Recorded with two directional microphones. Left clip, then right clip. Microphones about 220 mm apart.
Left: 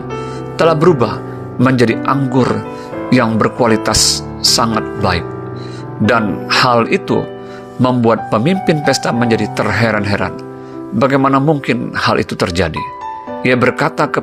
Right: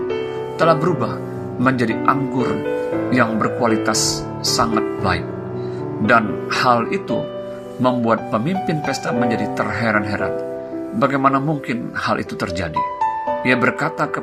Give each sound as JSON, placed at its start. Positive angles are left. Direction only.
{"t": 0.6, "sound": "speech", "side_deg": 40}